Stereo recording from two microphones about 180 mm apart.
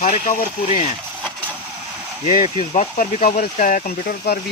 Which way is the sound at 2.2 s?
40° left (ahead or behind).